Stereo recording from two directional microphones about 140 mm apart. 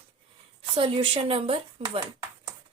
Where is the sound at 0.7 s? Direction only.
40° right (ahead or behind).